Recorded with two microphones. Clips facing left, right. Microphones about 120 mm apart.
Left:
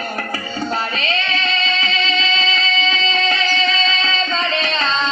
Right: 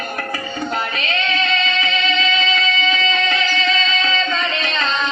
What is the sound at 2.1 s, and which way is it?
Music, 30° left (ahead or behind).